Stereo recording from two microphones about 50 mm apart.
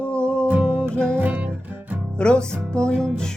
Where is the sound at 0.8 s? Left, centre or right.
Centre.